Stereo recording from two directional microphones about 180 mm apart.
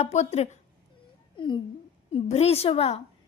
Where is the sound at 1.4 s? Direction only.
25° left (ahead or behind).